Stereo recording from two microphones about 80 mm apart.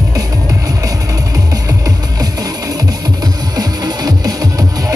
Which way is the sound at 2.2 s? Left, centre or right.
Right.